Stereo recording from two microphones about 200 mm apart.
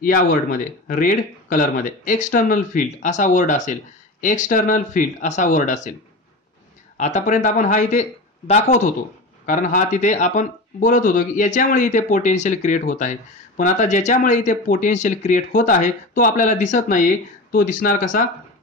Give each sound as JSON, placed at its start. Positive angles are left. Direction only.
{"t": 0.0, "sound": "speech", "side_deg": 45}
{"t": 7.0, "sound": "speech", "side_deg": 35}